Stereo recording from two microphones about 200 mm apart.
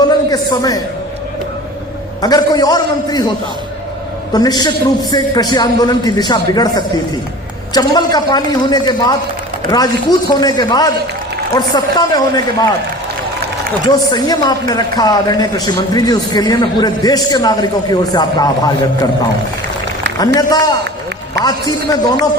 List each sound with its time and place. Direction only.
0.0 s speech: 20° left (ahead or behind)
2.2 s speech: 20° left (ahead or behind)
4.3 s speech: 20° left (ahead or behind)
13.8 s speech: 20° left (ahead or behind)
20.1 s speech: 20° left (ahead or behind)